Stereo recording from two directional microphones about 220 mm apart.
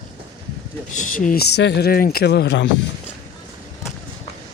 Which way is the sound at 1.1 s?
40° left (ahead or behind).